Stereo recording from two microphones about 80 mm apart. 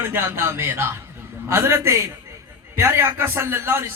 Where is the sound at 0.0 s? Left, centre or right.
Right.